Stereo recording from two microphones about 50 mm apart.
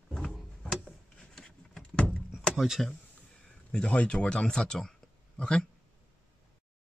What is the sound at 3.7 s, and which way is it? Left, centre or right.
Speech, left.